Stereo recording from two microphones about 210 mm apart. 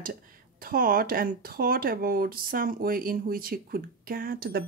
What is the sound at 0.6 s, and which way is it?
Speech, 45° right (ahead or behind).